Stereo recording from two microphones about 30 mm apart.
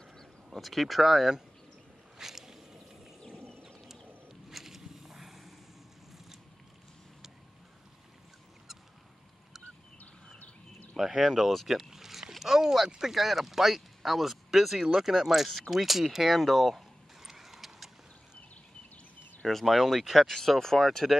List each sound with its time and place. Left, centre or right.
0.6 s speech: centre
2.1 s boat: centre
3.6 s a sound: centre
10.4 s a sound: left
11.0 s speech: centre
11.5 s boat: centre
12.8 s speech: centre
13.1 s speech: centre
15.7 s a sound: centre
19.6 s speech: centre
20.2 s speech: centre